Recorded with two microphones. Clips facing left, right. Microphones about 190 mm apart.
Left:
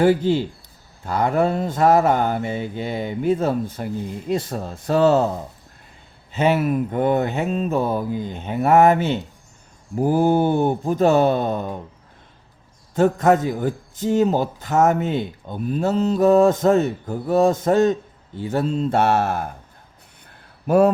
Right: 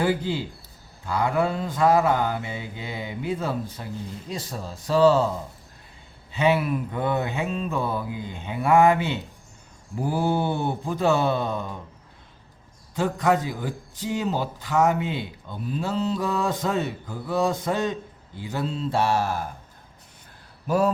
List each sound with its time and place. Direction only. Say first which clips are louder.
0.0 s a man's voice: left 8 dB; 50° left (ahead or behind)
6.3 s a man's voice: left 3 dB; 45° left (ahead or behind)
12.9 s a man's voice: left 6 dB; 45° left (ahead or behind)
20.7 s speech: left 7 dB; 60° left (ahead or behind)